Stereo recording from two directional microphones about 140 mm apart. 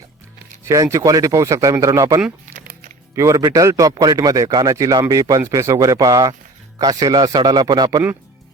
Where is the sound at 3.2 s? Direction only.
25° right (ahead or behind).